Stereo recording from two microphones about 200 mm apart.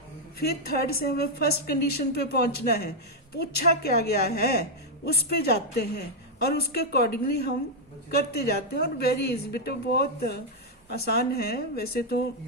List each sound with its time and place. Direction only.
0.3 s a woman's voice: 50° left (ahead or behind)